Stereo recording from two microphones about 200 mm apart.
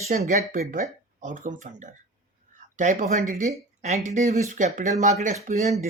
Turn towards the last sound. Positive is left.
turn(degrees=-35)  # may be behind; listen again after turning